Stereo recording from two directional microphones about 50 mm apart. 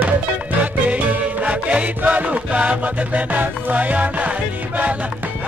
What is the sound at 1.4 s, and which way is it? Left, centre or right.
Music, right.